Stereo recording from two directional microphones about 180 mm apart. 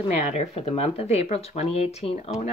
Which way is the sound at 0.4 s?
35° left (ahead or behind).